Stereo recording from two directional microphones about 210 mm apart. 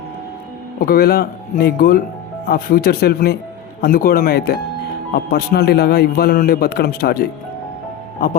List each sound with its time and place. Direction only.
0.8 s a man's voice: 45° left (ahead or behind)